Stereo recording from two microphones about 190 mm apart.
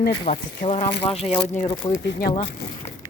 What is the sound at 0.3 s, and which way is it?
Speech, 40° left (ahead or behind).